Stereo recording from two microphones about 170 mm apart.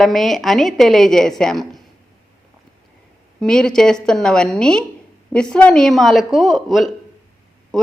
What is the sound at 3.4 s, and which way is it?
A woman's voice, 5° left (ahead or behind).